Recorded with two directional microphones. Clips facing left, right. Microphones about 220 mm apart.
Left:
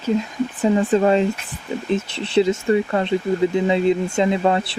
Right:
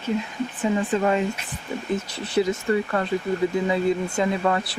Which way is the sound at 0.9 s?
35° left (ahead or behind).